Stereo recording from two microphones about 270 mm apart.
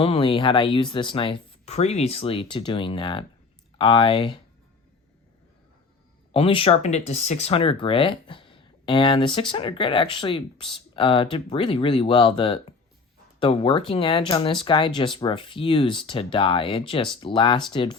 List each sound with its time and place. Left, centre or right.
0.0 s speech: centre
6.3 s speech: left